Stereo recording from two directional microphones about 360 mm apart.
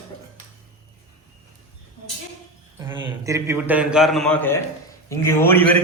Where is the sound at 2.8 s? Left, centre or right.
Centre.